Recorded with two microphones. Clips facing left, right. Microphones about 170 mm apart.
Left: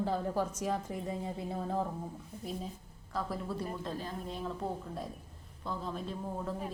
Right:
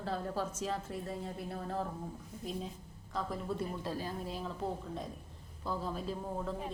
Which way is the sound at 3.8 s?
10° right (ahead or behind).